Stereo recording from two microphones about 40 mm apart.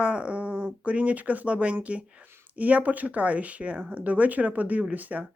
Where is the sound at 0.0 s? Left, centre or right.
Right.